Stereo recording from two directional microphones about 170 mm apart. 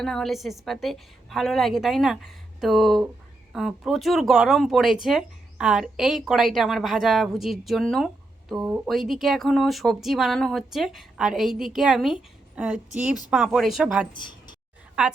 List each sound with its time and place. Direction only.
0.0 s speech: 5° left (ahead or behind)
14.1 s speech: 25° left (ahead or behind)